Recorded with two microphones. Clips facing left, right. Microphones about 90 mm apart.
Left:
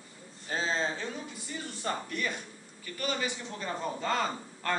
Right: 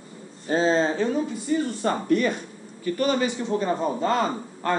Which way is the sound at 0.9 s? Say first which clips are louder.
Right 13 dB; 45° right (ahead or behind).